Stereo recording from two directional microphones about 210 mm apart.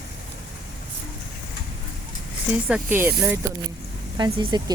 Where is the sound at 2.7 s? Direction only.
10° right (ahead or behind).